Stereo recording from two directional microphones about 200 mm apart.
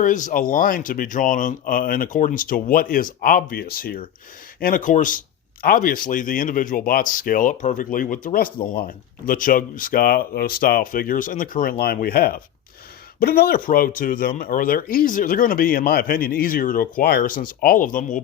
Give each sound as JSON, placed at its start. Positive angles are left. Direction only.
{"t": 0.0, "sound": "speech", "side_deg": 40}